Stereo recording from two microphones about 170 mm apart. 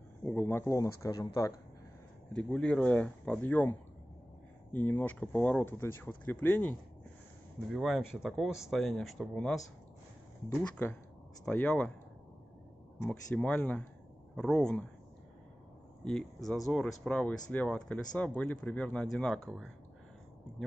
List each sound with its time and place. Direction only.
0.2 s speech: 10° left (ahead or behind)
2.3 s speech: 5° left (ahead or behind)
4.7 s speech: 10° left (ahead or behind)
7.7 s speech: centre (ahead or behind)
11.4 s speech: 5° left (ahead or behind)
13.1 s speech: 5° left (ahead or behind)
16.0 s speech: 5° left (ahead or behind)